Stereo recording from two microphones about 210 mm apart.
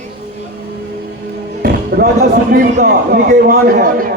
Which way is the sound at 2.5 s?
40° right (ahead or behind).